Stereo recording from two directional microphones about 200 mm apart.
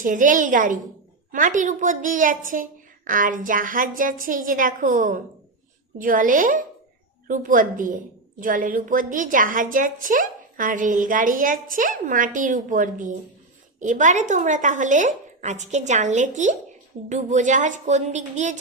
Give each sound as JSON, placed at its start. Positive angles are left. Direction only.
{"t": 0.0, "sound": "a woman's voice", "side_deg": -40}